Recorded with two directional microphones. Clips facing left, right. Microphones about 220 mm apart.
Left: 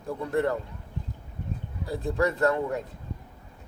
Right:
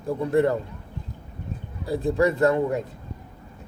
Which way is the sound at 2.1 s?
15° right (ahead or behind).